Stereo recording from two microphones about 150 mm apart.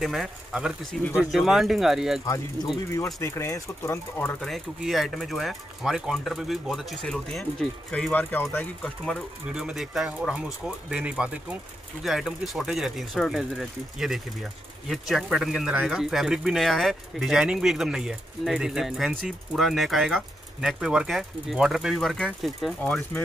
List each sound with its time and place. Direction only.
0.0 s speech: centre (ahead or behind)
2.2 s speech: 20° left (ahead or behind)
4.2 s speech: 5° left (ahead or behind)
9.5 s speech: 5° right (ahead or behind)